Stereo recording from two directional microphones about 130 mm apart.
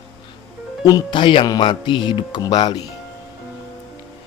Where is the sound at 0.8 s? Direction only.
35° left (ahead or behind).